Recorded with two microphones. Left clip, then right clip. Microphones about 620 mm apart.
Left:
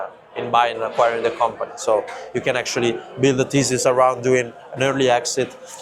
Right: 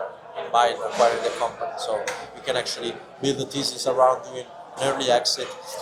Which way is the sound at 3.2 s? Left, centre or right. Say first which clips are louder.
Left 8 dB; left.